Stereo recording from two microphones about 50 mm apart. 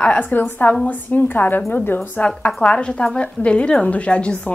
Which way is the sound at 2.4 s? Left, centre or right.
Centre.